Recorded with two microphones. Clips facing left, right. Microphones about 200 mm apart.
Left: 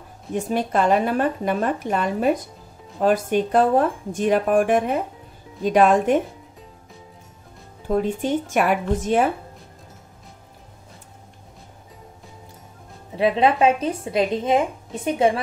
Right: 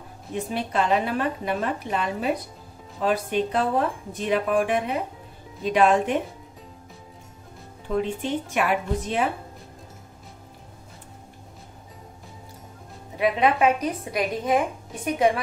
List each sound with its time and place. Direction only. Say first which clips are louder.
0.3 s speech: left 5 dB; 45° left (ahead or behind)
7.9 s speech: left 4 dB; 45° left (ahead or behind)
13.1 s speech: left 3 dB; 30° left (ahead or behind)